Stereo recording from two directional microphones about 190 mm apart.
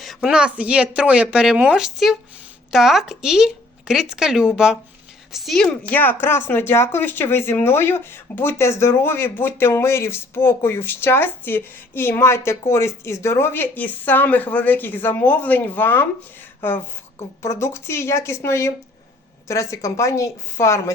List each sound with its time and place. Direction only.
0.0 s a woman's voice: centre (ahead or behind); by 20.9 s 15° left (ahead or behind)